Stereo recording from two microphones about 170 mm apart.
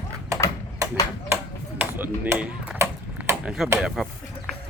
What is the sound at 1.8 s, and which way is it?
Chop, 10° right (ahead or behind).